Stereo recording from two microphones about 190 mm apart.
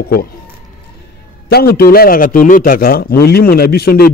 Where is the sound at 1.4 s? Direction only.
55° left (ahead or behind).